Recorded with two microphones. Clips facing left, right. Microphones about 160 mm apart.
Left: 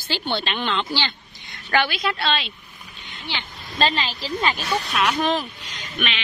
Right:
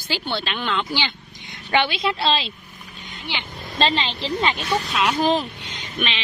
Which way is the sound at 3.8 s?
25° right (ahead or behind).